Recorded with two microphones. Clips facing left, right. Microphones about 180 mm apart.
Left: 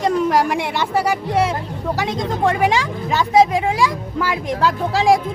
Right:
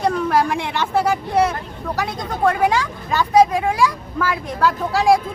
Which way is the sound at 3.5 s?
20° left (ahead or behind).